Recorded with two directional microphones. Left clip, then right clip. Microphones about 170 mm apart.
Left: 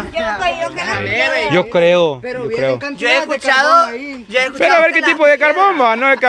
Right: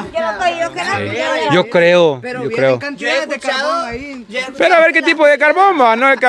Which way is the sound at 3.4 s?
15° left (ahead or behind).